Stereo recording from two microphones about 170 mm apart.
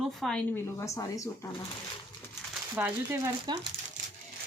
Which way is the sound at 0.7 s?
20° left (ahead or behind).